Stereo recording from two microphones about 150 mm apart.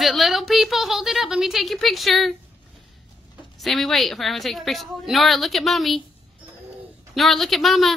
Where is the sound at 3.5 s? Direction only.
Centre (ahead or behind).